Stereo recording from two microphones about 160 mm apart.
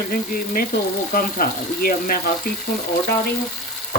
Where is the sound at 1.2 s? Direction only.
65° left (ahead or behind).